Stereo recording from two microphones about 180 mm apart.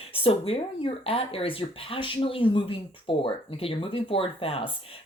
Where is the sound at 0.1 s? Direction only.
30° left (ahead or behind).